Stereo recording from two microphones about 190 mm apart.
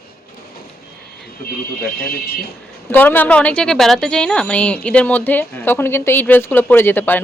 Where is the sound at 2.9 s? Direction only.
10° left (ahead or behind).